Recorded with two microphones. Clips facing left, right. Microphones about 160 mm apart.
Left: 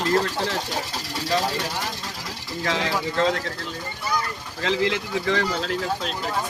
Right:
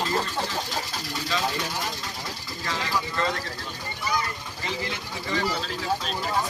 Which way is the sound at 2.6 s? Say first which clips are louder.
Left 4 dB; 75° left (ahead or behind).